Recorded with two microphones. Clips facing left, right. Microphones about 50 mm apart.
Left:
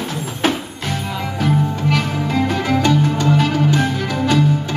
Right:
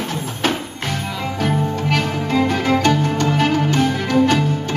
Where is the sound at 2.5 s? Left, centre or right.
Right.